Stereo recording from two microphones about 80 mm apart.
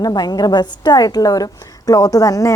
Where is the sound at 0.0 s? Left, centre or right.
Left.